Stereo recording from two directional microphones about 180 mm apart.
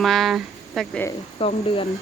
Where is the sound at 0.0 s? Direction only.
Centre (ahead or behind).